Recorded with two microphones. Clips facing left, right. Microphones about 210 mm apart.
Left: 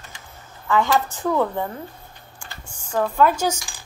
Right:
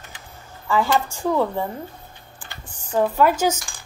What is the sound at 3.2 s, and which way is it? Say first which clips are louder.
Speech: left 1 dB; 5° right (ahead or behind).